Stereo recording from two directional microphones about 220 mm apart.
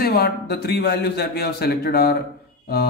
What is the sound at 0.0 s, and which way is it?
Speech, 45° left (ahead or behind).